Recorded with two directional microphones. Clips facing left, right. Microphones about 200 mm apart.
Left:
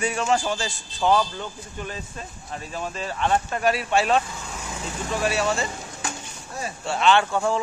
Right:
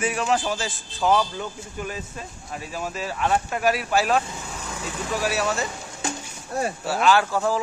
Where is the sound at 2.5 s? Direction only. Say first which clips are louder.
Even; 5° right (ahead or behind).